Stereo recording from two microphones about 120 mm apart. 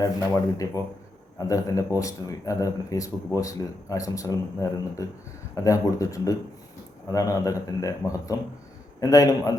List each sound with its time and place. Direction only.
0.0 s speech: 30° left (ahead or behind)